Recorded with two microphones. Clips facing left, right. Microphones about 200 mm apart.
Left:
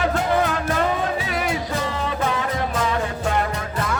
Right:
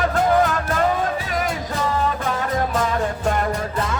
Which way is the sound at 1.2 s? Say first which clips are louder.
Even; 45° right (ahead or behind).